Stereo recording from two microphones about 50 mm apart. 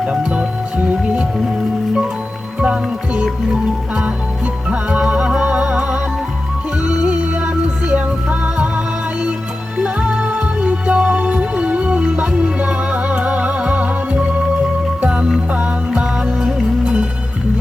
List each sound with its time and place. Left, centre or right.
0.0 s music: right
4.7 s music: right
9.7 s music: right